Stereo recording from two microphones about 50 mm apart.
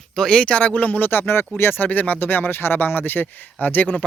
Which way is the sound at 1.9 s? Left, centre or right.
Left.